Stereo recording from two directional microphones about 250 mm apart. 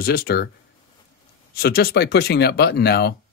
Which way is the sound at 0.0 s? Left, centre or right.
Left.